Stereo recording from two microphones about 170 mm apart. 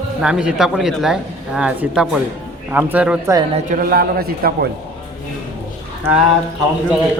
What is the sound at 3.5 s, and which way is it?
A man's voice, 50° right (ahead or behind).